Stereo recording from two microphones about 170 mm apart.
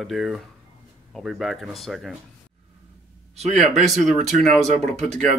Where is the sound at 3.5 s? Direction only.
Centre (ahead or behind).